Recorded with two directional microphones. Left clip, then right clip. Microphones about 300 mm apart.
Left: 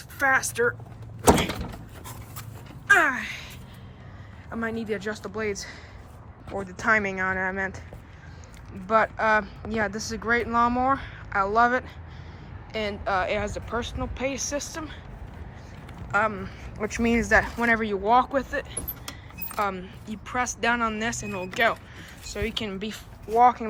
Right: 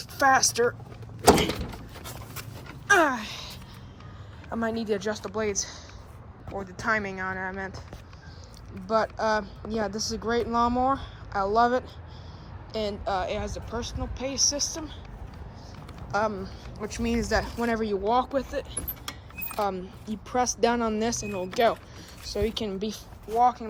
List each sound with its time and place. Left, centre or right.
0.2 s speech: centre
2.8 s a sound: centre
4.5 s speech: centre
8.9 s speech: centre
16.1 s speech: centre